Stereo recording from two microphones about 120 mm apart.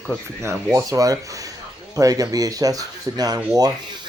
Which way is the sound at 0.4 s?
25° right (ahead or behind).